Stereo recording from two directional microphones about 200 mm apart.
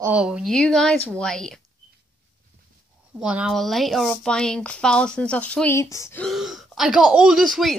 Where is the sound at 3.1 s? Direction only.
5° right (ahead or behind); by 6.3 s 15° left (ahead or behind).